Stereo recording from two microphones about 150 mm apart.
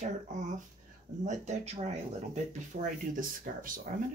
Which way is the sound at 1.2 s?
50° right (ahead or behind).